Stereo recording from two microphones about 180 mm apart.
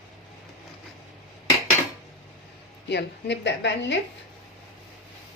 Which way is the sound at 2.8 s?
75° left (ahead or behind).